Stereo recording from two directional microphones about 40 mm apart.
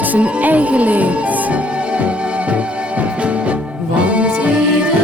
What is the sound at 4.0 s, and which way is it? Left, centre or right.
Music, right.